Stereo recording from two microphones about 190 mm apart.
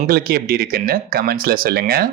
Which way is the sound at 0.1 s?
55° right (ahead or behind).